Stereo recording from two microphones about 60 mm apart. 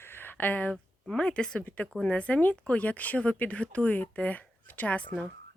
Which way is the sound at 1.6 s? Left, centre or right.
Left.